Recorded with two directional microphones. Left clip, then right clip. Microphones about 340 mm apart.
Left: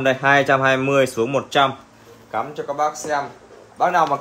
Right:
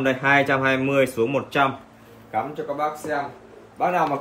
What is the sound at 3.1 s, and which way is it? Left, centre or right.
Speech, centre.